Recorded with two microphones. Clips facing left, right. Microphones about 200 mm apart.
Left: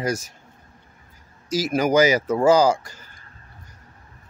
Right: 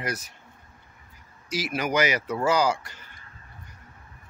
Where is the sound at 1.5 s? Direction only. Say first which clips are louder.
Left 7 dB; 45° left (ahead or behind).